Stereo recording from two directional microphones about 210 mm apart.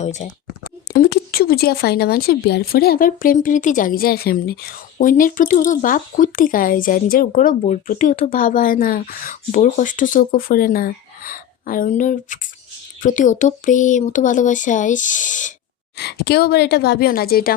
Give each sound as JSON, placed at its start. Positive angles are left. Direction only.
{"t": 0.0, "sound": "speech", "side_deg": 35}
{"t": 0.9, "sound": "speech", "side_deg": 45}
{"t": 16.0, "sound": "a woman's voice", "side_deg": 50}